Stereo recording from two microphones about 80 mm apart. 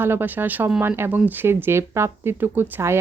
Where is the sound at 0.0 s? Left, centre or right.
Right.